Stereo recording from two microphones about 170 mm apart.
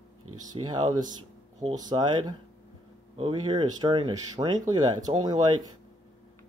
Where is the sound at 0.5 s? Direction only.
25° right (ahead or behind).